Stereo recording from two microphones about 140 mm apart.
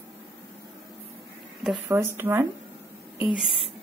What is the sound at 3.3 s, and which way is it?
Speech, centre (ahead or behind).